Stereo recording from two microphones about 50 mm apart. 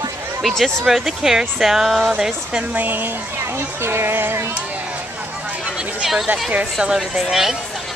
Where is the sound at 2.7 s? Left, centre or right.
Right.